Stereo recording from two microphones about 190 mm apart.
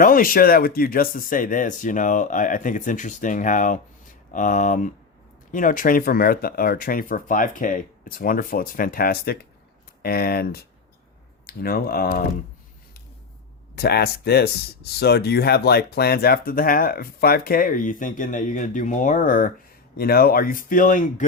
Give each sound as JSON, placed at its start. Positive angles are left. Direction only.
{"t": 0.0, "sound": "speech", "side_deg": 50}
{"t": 13.7, "sound": "speech", "side_deg": 55}